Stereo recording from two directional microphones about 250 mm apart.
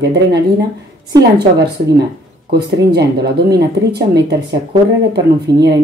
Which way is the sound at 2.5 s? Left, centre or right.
Right.